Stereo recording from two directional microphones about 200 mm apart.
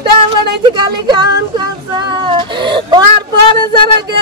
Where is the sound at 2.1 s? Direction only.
25° right (ahead or behind).